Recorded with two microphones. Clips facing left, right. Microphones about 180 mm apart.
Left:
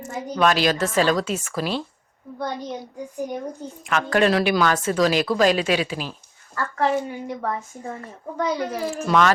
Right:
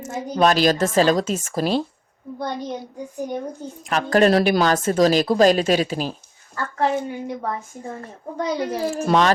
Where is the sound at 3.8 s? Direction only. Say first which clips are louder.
Right 3 dB; 40° right (ahead or behind).